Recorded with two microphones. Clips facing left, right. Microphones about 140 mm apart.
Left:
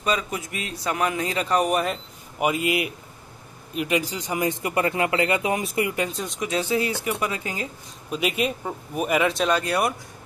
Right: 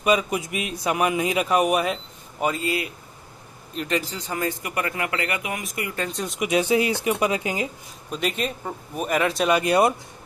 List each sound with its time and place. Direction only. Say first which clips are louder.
0.0 s a man's voice: right 4 dB; 15° right (ahead or behind)
2.4 s a man's voice: left 2 dB; 15° left (ahead or behind)
6.0 s speech: right 1 dB; centre (ahead or behind)
6.4 s a man's voice: right 4 dB; 15° right (ahead or behind)
8.1 s speech: left 2 dB; 5° left (ahead or behind)
9.6 s speech: right 5 dB; 20° right (ahead or behind)